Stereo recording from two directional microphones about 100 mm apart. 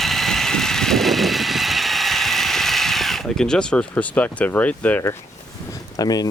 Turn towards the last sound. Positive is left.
turn(degrees=40)  # may be behind; listen again after turning